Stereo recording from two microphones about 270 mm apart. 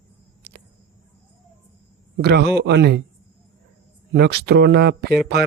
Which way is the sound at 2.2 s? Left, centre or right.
Right.